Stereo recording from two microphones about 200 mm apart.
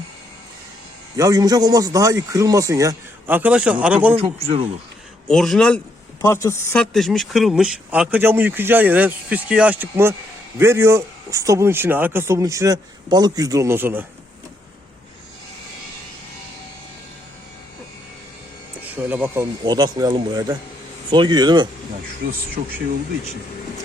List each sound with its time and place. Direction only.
1.1 s a man's voice: 15° right (ahead or behind)
4.1 s speech: 25° right (ahead or behind)
5.3 s a man's voice: centre (ahead or behind)
6.9 s a man's voice: centre (ahead or behind)
18.9 s speech: 10° right (ahead or behind)
22.6 s speech: 35° right (ahead or behind)